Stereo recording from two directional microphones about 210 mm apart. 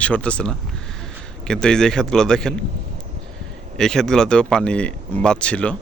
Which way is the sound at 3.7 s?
Centre (ahead or behind).